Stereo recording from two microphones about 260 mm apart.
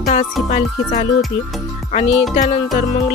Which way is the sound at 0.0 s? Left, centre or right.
Left.